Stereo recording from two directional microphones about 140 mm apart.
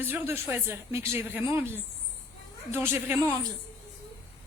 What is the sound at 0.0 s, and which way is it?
Speech, 15° right (ahead or behind).